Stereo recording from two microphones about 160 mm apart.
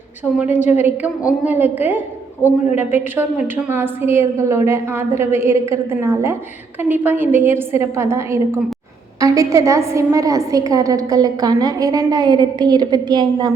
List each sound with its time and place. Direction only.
0.3 s a woman's voice: 10° right (ahead or behind)